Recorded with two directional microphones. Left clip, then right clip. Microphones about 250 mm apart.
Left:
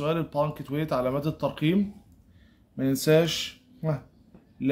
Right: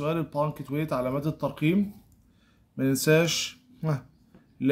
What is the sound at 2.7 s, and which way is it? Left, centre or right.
A man's voice, centre.